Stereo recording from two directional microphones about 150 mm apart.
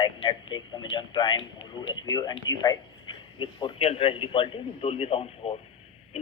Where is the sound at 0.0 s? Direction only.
30° left (ahead or behind).